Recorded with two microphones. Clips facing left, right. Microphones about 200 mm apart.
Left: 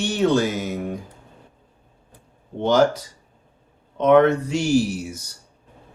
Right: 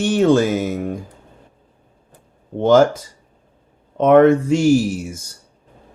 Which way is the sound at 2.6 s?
50° right (ahead or behind).